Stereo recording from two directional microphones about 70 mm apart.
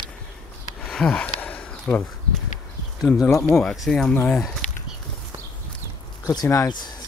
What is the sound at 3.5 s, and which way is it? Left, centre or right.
Speech, centre.